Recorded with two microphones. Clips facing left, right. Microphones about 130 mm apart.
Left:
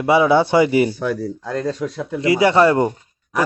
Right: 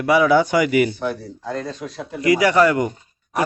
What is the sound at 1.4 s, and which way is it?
Speech, 90° left.